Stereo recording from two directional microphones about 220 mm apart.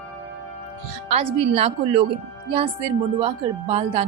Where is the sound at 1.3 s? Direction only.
25° right (ahead or behind).